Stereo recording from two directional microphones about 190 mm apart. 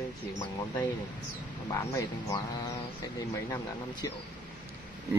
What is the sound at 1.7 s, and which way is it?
Speech, 15° left (ahead or behind).